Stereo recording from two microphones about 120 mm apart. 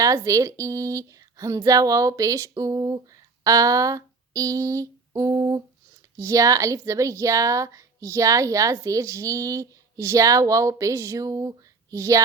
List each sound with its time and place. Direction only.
0.0 s speech: 25° right (ahead or behind)
3.4 s a sound: 30° right (ahead or behind)
6.1 s speech: 25° right (ahead or behind)